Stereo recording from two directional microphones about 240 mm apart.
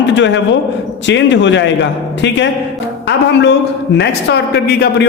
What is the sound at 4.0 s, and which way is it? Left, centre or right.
A man's voice, left.